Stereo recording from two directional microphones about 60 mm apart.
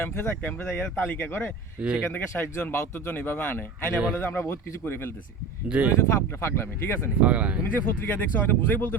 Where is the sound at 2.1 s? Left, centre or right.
Left.